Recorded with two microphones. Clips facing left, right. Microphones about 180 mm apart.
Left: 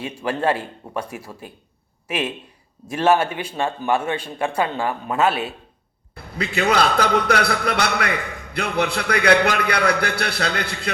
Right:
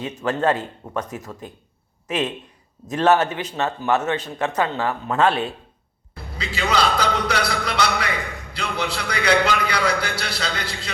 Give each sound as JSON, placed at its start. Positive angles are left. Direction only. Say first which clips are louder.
{"t": 0.0, "sound": "a man's voice", "louder": "right 1 dB", "side_deg": 10}
{"t": 6.3, "sound": "a man's voice", "louder": "left 3 dB", "side_deg": 55}